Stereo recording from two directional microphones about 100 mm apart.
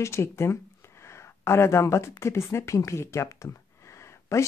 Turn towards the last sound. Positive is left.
turn(degrees=30)  # may be behind; listen again after turning